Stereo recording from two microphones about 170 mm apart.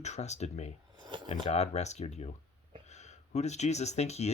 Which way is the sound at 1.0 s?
25° right (ahead or behind).